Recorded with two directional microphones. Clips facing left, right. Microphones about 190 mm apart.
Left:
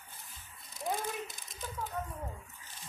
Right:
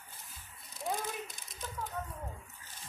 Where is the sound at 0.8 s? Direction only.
Centre (ahead or behind).